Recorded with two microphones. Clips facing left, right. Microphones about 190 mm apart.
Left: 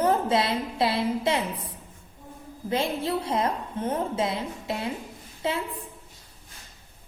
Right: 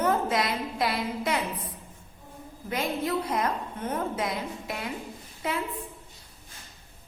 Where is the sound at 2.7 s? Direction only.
30° left (ahead or behind).